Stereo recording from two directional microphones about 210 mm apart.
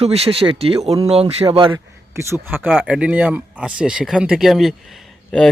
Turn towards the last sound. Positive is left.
turn(degrees=0)  # may be behind; listen again after turning